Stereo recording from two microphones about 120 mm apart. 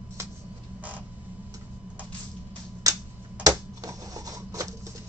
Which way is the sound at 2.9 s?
30° right (ahead or behind).